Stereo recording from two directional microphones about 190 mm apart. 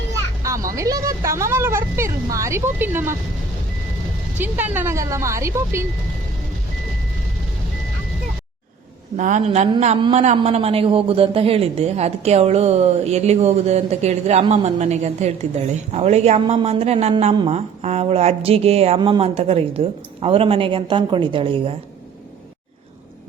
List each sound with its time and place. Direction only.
0.4 s children playing: 15° right (ahead or behind)
0.8 s speech: 15° right (ahead or behind)
4.4 s speech: 10° right (ahead or behind)
9.1 s a man's voice: 40° right (ahead or behind)